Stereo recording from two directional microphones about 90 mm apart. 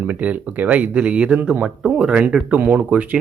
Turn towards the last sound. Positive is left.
turn(degrees=-15)  # may be behind; listen again after turning